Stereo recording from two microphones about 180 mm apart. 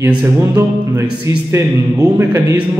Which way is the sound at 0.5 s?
20° right (ahead or behind).